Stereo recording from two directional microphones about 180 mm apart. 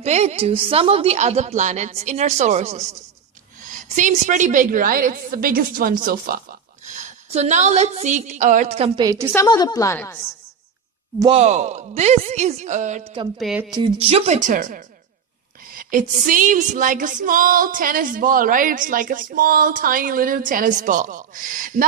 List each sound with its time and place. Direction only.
0.0 s a woman's voice: 35° right (ahead or behind)
3.6 s female singing: 45° right (ahead or behind)
6.9 s a woman's voice: 40° right (ahead or behind)
9.0 s a woman's voice: 15° right (ahead or behind)
9.3 s a woman's voice: 20° left (ahead or behind)
11.3 s a woman's voice: 40° right (ahead or behind)
13.4 s speech: 5° right (ahead or behind)
13.7 s a woman's voice: 30° right (ahead or behind); by 14.8 s 45° right (ahead or behind)
15.7 s female singing: 50° right (ahead or behind)